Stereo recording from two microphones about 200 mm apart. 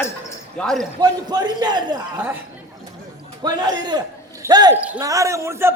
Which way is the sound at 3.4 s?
20° right (ahead or behind).